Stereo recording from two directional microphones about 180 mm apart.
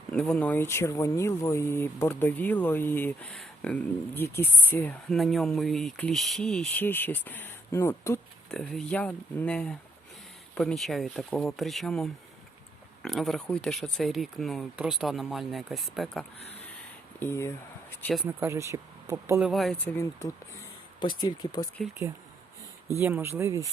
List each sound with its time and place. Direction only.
0.1 s speech: 5° left (ahead or behind)
8.4 s speech: 5° left (ahead or behind)
17.2 s speech: 15° left (ahead or behind)
18.3 s speech: 15° right (ahead or behind)
19.4 s speech: centre (ahead or behind)
19.8 s speech: 15° left (ahead or behind)
23.0 s speech: 10° right (ahead or behind)